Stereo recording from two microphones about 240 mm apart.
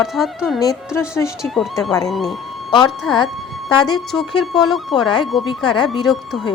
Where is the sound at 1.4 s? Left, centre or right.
Centre.